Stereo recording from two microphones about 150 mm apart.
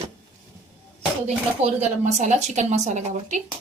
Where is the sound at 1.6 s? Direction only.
50° right (ahead or behind).